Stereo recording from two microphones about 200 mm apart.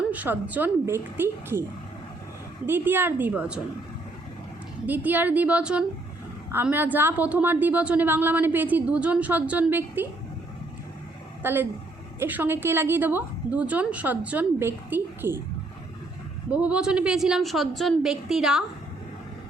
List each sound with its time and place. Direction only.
0.1 s a woman's voice: 10° right (ahead or behind)
2.6 s a woman's voice: 10° right (ahead or behind)
4.9 s a woman's voice: 10° right (ahead or behind)
11.4 s a woman's voice: 10° right (ahead or behind)
16.5 s a woman's voice: 5° right (ahead or behind)